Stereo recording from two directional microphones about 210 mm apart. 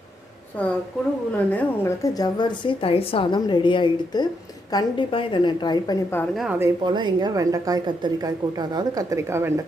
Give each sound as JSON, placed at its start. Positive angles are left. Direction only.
{"t": 1.5, "sound": "a woman's voice", "side_deg": 10}
{"t": 6.3, "sound": "a woman's voice", "side_deg": 0}
{"t": 6.6, "sound": "a woman's voice", "side_deg": -20}